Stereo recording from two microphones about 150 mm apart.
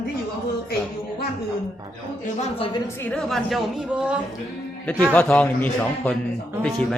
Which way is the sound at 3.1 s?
Centre (ahead or behind).